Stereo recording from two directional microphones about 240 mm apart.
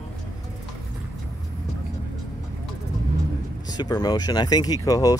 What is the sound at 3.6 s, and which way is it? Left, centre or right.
Speech, centre.